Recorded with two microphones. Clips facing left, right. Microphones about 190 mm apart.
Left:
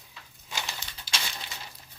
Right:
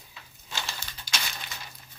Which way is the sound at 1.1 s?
30° left (ahead or behind).